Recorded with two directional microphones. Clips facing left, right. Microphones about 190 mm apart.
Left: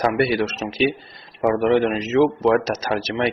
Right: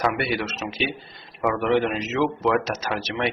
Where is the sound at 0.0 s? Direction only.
40° left (ahead or behind).